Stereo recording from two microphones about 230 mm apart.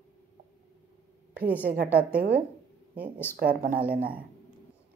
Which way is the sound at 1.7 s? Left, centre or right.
Right.